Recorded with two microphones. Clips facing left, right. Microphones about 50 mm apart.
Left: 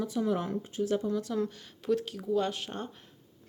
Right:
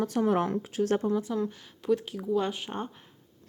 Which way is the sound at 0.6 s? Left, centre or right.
Right.